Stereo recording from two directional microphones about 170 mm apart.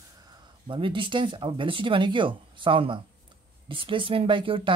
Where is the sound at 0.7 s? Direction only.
30° right (ahead or behind).